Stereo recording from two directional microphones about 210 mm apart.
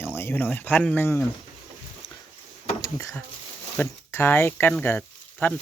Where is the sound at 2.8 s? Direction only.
15° left (ahead or behind).